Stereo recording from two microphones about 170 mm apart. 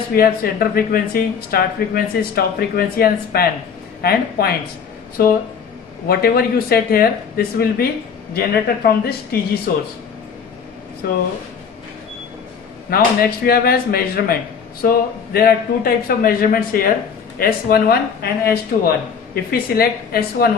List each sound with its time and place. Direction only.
0.1 s speech: 60° left (ahead or behind)
11.0 s speech: 65° left (ahead or behind)
12.9 s speech: 60° left (ahead or behind)